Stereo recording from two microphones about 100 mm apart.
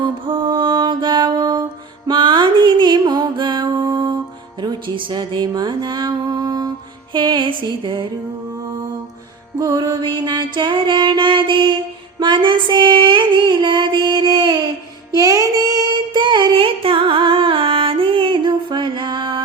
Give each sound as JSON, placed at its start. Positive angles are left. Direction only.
{"t": 0.0, "sound": "music", "side_deg": -55}
{"t": 7.1, "sound": "music", "side_deg": -50}
{"t": 9.6, "sound": "mantra", "side_deg": -40}
{"t": 12.2, "sound": "female singing", "side_deg": -50}
{"t": 15.1, "sound": "music", "side_deg": -35}